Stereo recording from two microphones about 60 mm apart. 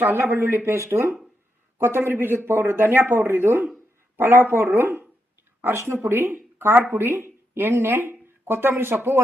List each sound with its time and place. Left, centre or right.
0.0 s speech: right
5.6 s a woman's voice: right